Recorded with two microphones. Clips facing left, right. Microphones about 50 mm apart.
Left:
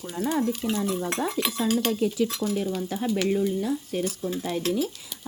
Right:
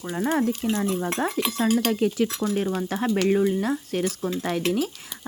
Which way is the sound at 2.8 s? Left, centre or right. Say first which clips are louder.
Right 3 dB; right.